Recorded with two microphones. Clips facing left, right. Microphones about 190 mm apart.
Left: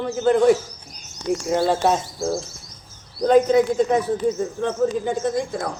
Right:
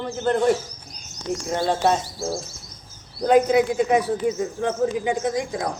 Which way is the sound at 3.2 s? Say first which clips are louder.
Left 2 dB; 10° right (ahead or behind).